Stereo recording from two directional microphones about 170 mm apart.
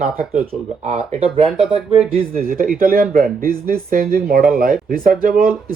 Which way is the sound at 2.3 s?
55° right (ahead or behind).